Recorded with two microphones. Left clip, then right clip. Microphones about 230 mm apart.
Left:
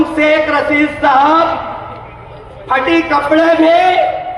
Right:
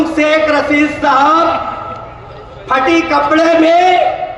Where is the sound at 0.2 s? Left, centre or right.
Right.